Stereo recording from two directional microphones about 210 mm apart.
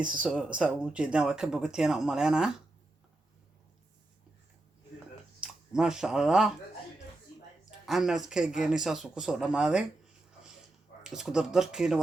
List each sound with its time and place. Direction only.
0.0 s speech: 5° right (ahead or behind)
5.4 s speech: 5° right (ahead or behind)
7.9 s speech: centre (ahead or behind)
11.0 s speech: 5° right (ahead or behind)